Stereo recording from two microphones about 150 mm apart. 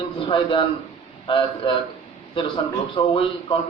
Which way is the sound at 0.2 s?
35° left (ahead or behind).